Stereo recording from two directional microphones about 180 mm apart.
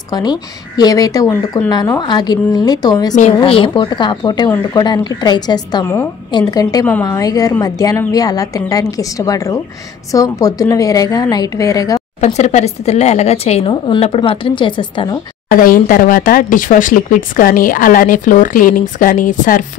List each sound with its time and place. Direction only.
0.1 s speech: 20° left (ahead or behind)
12.2 s speech: 40° left (ahead or behind)
15.6 s speech: 50° left (ahead or behind)